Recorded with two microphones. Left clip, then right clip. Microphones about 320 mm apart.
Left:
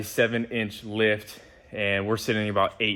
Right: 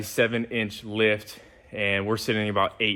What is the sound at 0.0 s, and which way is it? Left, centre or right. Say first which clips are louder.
A man's voice: even; centre.